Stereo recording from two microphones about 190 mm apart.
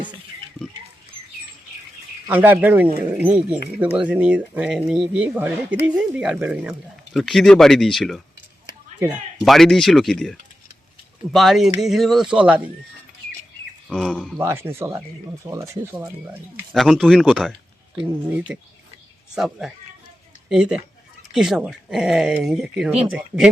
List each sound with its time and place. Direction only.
2.2 s speech: 10° right (ahead or behind)
13.9 s speech: centre (ahead or behind)
14.3 s speech: 10° right (ahead or behind)
16.7 s speech: centre (ahead or behind)